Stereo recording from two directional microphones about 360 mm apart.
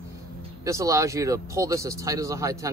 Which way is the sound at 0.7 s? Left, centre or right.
Centre.